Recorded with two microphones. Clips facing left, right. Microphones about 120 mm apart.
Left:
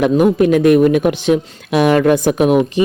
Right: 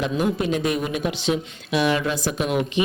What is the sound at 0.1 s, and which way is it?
Speech, 55° left (ahead or behind).